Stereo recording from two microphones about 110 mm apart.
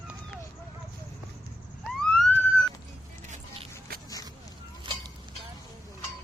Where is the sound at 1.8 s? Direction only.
5° left (ahead or behind).